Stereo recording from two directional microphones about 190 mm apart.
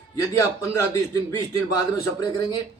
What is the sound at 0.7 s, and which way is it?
A man's voice, 15° left (ahead or behind).